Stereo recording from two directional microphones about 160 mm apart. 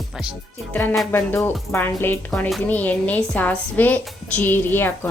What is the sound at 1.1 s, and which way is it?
A woman's voice, 15° left (ahead or behind).